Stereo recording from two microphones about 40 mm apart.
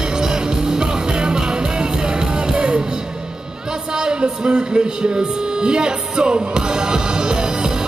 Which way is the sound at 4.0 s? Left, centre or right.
Right.